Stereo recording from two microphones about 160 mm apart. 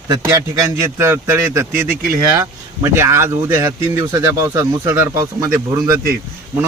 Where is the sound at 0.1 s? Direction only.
20° right (ahead or behind).